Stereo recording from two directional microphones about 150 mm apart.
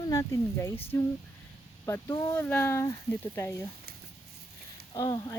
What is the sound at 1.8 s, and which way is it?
Speech, 20° left (ahead or behind).